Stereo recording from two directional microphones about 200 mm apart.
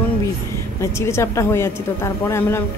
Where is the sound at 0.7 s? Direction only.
15° left (ahead or behind).